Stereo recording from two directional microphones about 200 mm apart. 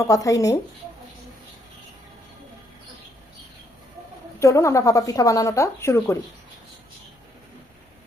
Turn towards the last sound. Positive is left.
turn(degrees=15)  # may be behind; listen again after turning